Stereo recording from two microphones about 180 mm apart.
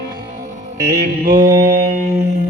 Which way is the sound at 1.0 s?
55° right (ahead or behind).